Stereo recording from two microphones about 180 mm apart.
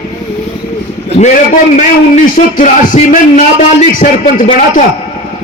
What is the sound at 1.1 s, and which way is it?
A man's voice, 40° left (ahead or behind).